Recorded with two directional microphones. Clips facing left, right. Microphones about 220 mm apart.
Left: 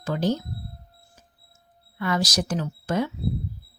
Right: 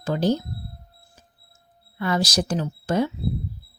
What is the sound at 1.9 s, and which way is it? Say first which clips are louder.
Speech: right 2 dB; 30° right (ahead or behind).